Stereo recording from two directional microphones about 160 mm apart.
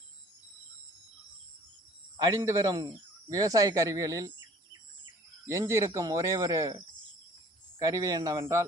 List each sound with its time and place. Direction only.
2.1 s speech: 20° right (ahead or behind)
5.5 s speech: 20° right (ahead or behind)